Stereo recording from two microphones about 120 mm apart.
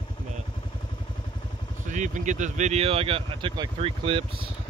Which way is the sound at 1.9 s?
90° right.